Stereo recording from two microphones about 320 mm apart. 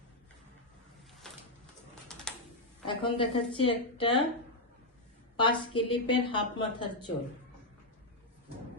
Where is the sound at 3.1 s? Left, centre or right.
Centre.